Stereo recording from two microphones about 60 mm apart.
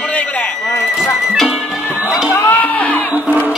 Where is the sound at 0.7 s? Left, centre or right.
Left.